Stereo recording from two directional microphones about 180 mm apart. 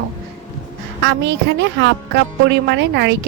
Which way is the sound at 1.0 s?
85° right.